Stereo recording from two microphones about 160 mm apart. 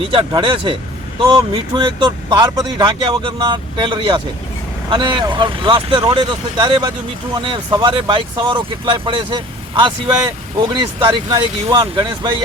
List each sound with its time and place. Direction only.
0.1 s speech: 35° right (ahead or behind)
10.6 s speech: 30° right (ahead or behind)